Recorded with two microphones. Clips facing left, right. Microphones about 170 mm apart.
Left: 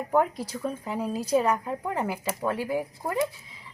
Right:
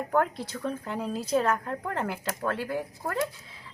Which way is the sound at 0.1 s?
10° left (ahead or behind).